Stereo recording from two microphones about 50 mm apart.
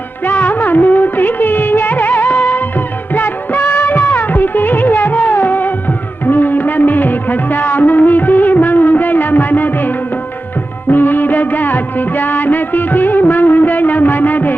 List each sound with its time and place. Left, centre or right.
0.3 s music of bollywood: left
6.2 s music: left
10.9 s music of bollywood: left